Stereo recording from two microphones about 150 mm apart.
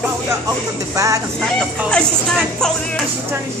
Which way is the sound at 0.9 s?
20° right (ahead or behind).